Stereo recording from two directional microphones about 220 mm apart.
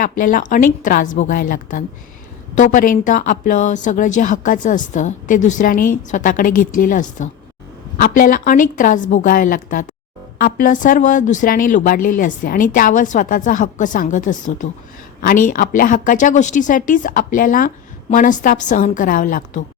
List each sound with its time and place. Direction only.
0.0 s a woman's voice: 40° left (ahead or behind)